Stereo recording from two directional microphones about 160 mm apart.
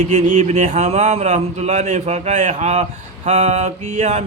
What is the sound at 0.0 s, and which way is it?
Mantra, 50° right (ahead or behind).